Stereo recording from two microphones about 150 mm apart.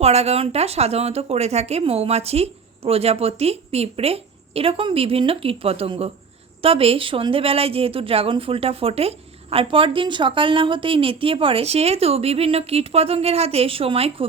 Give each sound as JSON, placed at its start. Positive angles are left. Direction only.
{"t": 0.0, "sound": "a woman's voice", "side_deg": -45}